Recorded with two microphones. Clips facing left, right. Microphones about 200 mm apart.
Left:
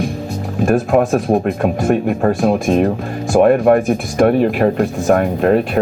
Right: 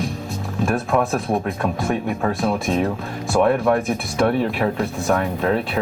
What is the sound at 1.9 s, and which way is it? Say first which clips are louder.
Speech: left 7 dB; 60° left (ahead or behind).